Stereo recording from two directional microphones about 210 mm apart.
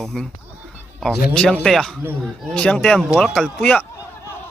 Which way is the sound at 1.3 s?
5° left (ahead or behind).